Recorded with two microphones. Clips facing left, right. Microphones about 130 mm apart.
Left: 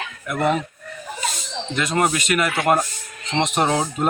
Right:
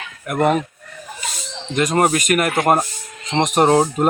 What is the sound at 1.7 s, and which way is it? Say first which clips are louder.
Speech: right 4 dB; 45° right (ahead or behind).